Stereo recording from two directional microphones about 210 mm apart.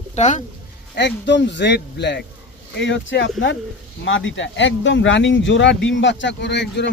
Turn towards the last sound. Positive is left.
turn(degrees=55)  # may be behind; listen again after turning